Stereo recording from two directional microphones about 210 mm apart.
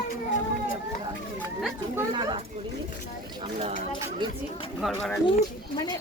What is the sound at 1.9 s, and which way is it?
Speech, 20° right (ahead or behind).